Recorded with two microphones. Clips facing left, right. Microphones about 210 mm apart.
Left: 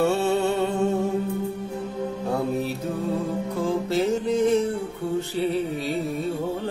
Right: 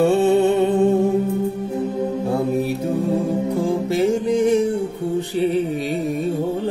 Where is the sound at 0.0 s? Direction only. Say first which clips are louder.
Right 6 dB; 20° right (ahead or behind).